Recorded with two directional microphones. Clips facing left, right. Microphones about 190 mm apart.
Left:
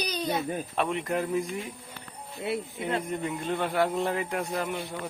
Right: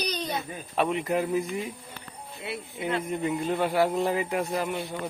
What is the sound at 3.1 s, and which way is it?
Speech, centre (ahead or behind).